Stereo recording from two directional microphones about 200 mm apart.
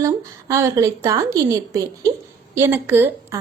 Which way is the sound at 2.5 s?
10° right (ahead or behind).